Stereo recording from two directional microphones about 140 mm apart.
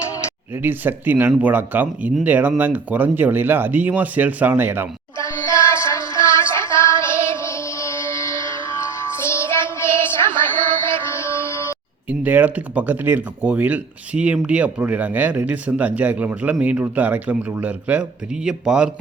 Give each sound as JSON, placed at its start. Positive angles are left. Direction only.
{"t": 0.6, "sound": "speech", "side_deg": -15}
{"t": 5.2, "sound": "music", "side_deg": 20}
{"t": 12.2, "sound": "speech", "side_deg": -10}